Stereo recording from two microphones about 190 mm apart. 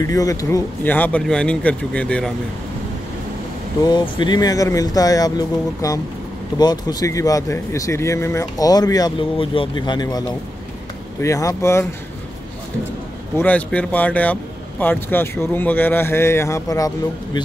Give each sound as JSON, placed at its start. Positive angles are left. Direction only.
{"t": 0.0, "sound": "speech", "side_deg": 20}
{"t": 3.8, "sound": "speech", "side_deg": 25}
{"t": 13.4, "sound": "speech", "side_deg": 5}